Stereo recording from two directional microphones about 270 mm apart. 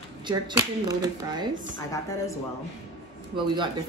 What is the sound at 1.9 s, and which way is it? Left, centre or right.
Speech, centre.